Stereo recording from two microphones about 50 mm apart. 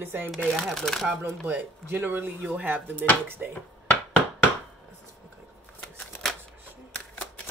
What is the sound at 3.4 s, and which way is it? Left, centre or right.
Speech, right.